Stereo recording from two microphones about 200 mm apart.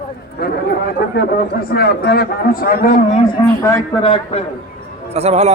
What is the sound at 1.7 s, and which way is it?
A man's voice, 55° left (ahead or behind).